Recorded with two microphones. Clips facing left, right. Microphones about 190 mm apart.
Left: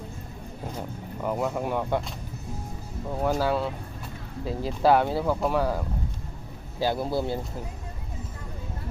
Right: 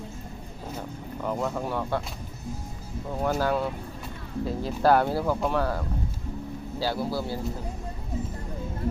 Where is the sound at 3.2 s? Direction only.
5° left (ahead or behind).